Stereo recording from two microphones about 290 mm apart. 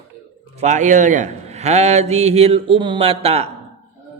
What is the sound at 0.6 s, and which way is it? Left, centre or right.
A man's voice, right.